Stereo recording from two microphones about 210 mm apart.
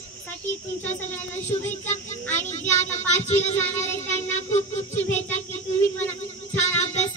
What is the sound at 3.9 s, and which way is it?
Speech, 10° left (ahead or behind).